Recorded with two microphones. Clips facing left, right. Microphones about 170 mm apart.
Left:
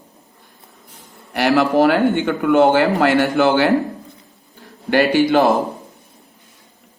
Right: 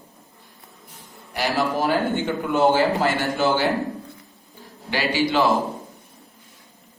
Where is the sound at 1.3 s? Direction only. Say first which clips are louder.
Left 8 dB; 65° left (ahead or behind).